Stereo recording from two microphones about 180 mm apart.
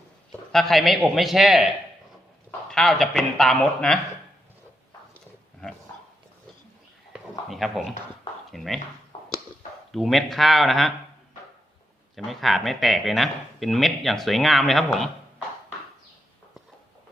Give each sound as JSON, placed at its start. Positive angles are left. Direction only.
{"t": 0.5, "sound": "speech", "side_deg": 0}
{"t": 5.1, "sound": "wild animals", "side_deg": 5}
{"t": 7.1, "sound": "a sound", "side_deg": 0}
{"t": 8.4, "sound": "speech", "side_deg": 0}
{"t": 9.1, "sound": "a sound", "side_deg": 30}
{"t": 9.9, "sound": "speech", "side_deg": 0}
{"t": 12.1, "sound": "speech", "side_deg": 0}